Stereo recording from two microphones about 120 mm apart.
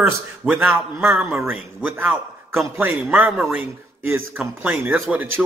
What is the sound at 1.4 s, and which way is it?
A man's voice, 15° right (ahead or behind).